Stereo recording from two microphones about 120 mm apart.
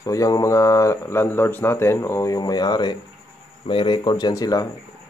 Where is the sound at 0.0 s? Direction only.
30° left (ahead or behind).